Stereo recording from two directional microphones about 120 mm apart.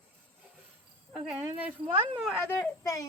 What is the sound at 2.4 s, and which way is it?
Speech, 20° left (ahead or behind).